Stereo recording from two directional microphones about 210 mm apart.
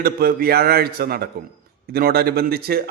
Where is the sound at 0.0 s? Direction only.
45° right (ahead or behind).